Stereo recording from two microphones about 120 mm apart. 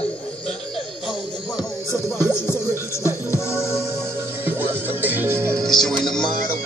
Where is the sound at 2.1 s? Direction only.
20° left (ahead or behind).